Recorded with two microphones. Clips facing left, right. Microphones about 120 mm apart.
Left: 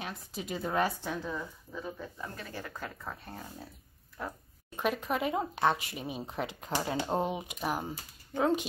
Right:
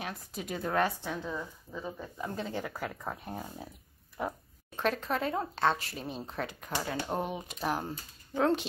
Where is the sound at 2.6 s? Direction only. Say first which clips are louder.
Right 4 dB; 10° right (ahead or behind).